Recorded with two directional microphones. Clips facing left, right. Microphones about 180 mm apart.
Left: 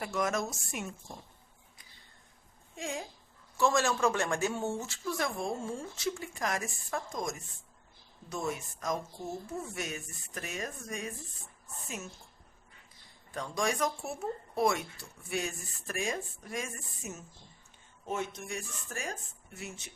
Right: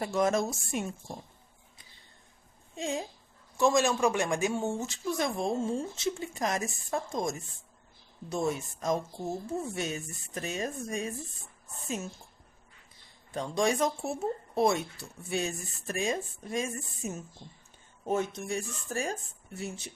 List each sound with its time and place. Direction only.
0.0 s speech: 30° right (ahead or behind)
2.7 s speech: 25° right (ahead or behind)
13.3 s speech: 25° right (ahead or behind)